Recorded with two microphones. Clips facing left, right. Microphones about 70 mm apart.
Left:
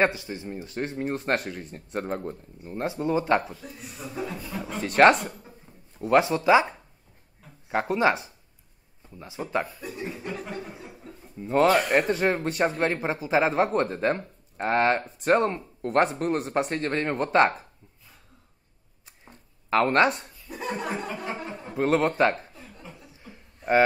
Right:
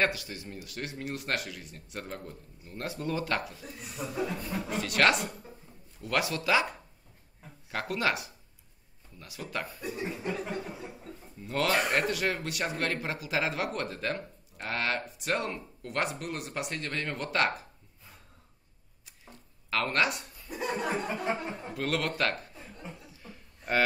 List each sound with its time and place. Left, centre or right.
0.0 s speech: left
4.2 s speech: centre
4.7 s speech: left
9.7 s speech: centre
10.2 s a sound: centre
11.4 s speech: left
19.7 s speech: left
20.4 s laughter: centre
21.0 s speech: centre
21.7 s speech: left
23.2 s a sound: left